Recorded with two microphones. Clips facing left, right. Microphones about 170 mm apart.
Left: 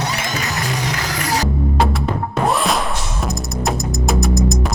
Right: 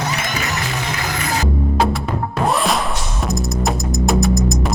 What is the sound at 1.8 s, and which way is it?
Music, centre (ahead or behind).